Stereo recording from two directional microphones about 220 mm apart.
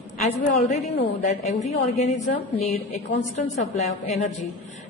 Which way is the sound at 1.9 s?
30° left (ahead or behind).